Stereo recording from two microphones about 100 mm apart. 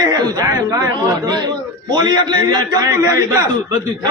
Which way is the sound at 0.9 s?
45° right (ahead or behind).